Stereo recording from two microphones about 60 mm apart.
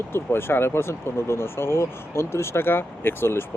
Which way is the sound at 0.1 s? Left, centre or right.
Left.